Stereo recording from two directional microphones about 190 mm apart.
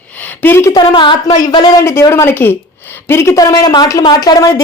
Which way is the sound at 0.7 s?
25° left (ahead or behind).